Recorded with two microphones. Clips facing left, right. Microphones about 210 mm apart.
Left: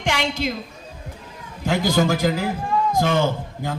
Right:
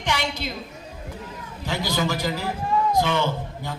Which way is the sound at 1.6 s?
50° left (ahead or behind).